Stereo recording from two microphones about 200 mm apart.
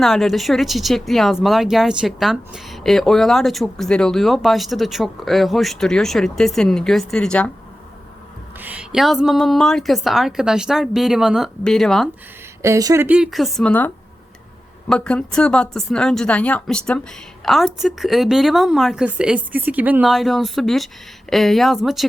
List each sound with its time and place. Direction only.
0.0 s speech: centre (ahead or behind)
8.5 s speech: 10° right (ahead or behind)
12.6 s speech: 15° right (ahead or behind)